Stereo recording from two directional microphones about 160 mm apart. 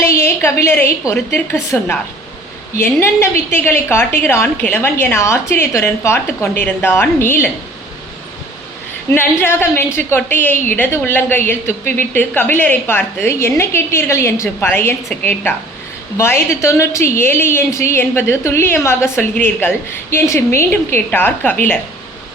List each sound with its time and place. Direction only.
0.0 s a woman's voice: 15° left (ahead or behind)
2.7 s a woman's voice: 15° left (ahead or behind)
9.1 s a woman's voice: 15° left (ahead or behind)